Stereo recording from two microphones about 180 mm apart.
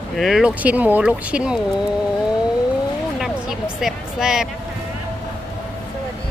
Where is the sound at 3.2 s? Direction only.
Centre (ahead or behind).